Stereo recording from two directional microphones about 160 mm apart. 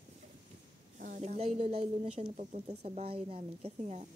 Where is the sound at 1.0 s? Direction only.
55° right (ahead or behind).